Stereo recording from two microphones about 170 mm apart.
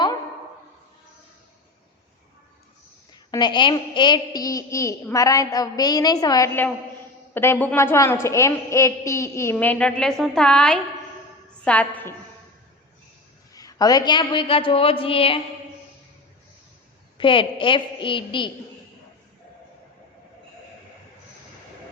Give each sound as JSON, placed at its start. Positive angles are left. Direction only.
{"t": 3.3, "sound": "a woman's voice", "side_deg": 25}
{"t": 13.5, "sound": "a woman's voice", "side_deg": 20}
{"t": 17.2, "sound": "a woman's voice", "side_deg": 30}